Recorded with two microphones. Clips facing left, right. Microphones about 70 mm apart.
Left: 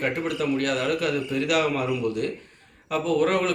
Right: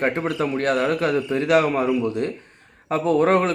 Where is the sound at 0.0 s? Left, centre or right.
Right.